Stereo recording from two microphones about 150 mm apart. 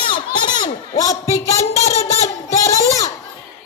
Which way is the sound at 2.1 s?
20° left (ahead or behind).